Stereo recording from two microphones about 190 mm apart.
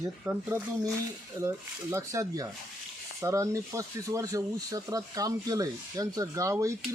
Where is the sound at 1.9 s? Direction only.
15° right (ahead or behind).